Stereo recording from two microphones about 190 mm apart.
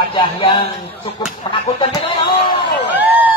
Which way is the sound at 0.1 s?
30° left (ahead or behind).